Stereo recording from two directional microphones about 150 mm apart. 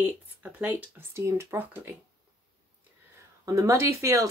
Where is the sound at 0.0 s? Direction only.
10° right (ahead or behind).